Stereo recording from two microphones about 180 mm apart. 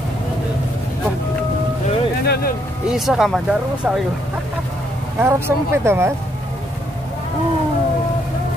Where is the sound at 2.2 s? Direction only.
60° left (ahead or behind).